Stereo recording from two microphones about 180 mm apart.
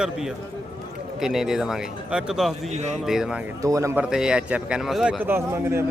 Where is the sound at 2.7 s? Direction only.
40° right (ahead or behind).